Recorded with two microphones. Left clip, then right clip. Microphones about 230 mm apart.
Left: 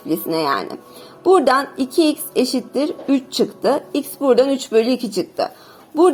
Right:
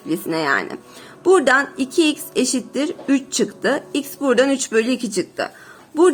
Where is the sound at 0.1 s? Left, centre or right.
Centre.